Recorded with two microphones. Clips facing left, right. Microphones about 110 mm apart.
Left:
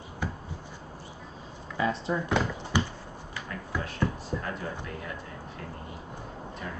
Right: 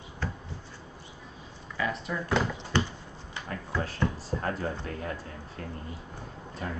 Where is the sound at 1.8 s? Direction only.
25° left (ahead or behind).